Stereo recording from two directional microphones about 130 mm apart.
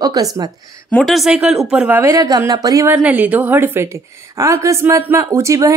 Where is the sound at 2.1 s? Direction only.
30° right (ahead or behind).